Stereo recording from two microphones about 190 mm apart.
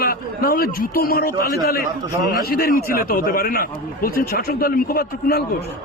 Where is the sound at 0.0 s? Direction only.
50° left (ahead or behind).